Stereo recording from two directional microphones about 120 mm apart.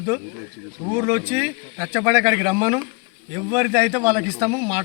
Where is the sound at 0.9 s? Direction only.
25° right (ahead or behind).